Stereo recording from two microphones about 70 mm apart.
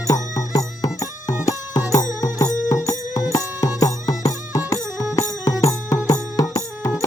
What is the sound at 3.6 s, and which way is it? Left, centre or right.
Music, left.